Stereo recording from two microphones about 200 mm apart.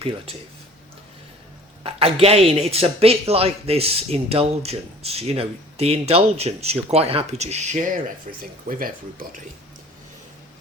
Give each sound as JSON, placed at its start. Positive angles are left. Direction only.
{"t": 1.8, "sound": "a man's voice", "side_deg": -30}